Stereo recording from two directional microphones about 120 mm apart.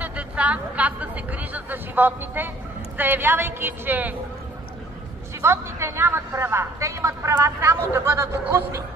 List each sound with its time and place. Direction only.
0.0 s a woman's voice: 10° right (ahead or behind)
5.4 s speech: 20° right (ahead or behind)